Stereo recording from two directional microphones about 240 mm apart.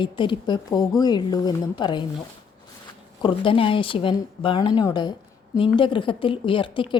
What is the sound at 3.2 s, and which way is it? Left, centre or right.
A woman's voice, left.